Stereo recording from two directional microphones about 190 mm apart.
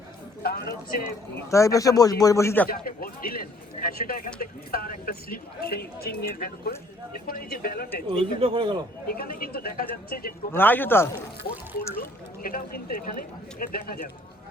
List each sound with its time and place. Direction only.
0.4 s speech: 55° left (ahead or behind)
1.5 s speech: 15° left (ahead or behind)
2.6 s speech: 50° left (ahead or behind)
8.1 s a man's voice: 30° right (ahead or behind)
9.0 s speech: 50° left (ahead or behind)
10.5 s speech: 10° left (ahead or behind)
12.4 s speech: 50° left (ahead or behind)